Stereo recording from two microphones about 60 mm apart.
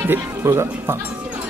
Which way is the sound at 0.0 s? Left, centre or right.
Right.